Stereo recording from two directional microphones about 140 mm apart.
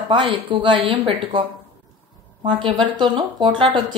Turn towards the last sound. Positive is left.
turn(degrees=-35)  # may be behind; listen again after turning